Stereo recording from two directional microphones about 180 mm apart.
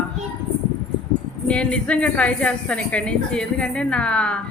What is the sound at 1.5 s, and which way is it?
A woman's voice, 5° left (ahead or behind).